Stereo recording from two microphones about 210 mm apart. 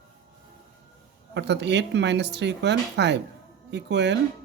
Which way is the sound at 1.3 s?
55° right (ahead or behind).